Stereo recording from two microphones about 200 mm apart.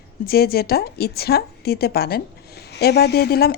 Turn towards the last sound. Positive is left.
turn(degrees=50)  # may be behind; listen again after turning